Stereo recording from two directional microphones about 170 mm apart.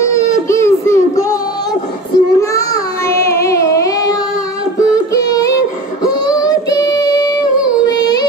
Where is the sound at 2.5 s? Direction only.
20° left (ahead or behind).